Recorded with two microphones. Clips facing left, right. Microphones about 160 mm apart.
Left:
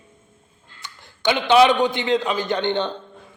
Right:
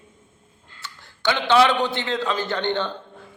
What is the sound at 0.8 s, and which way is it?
A man's voice, 15° left (ahead or behind).